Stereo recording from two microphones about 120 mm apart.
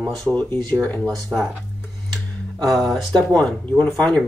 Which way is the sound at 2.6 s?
Centre (ahead or behind).